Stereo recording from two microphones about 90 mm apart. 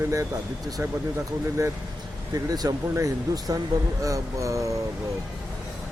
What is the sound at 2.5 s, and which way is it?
Speech, 45° right (ahead or behind).